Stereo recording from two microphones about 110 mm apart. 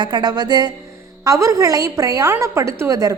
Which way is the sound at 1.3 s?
30° right (ahead or behind).